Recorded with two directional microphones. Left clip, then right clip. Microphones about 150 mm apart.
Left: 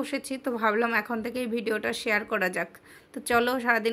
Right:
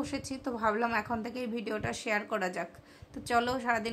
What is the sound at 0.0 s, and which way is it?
A woman's voice, 25° left (ahead or behind).